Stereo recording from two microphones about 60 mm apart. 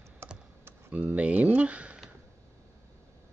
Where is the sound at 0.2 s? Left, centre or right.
Right.